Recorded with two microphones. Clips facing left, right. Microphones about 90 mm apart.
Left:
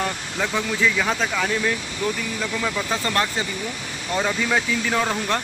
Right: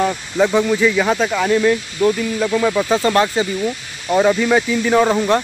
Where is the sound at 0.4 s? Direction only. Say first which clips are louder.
Right 9 dB; 20° right (ahead or behind).